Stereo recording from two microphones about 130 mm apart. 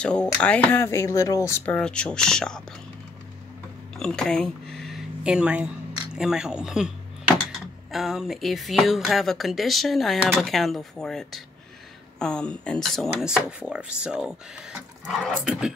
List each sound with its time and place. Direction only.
0.0 s speech: 5° left (ahead or behind)
1.8 s speech: 5° left (ahead or behind)
3.9 s a sound: 5° left (ahead or behind)
6.1 s speech: 5° right (ahead or behind)